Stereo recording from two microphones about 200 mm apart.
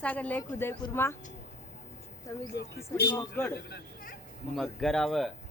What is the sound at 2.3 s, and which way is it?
A man's voice, 15° left (ahead or behind).